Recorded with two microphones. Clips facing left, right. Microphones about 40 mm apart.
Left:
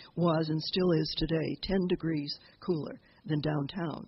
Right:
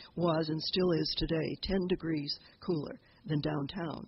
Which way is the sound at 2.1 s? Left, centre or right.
Centre.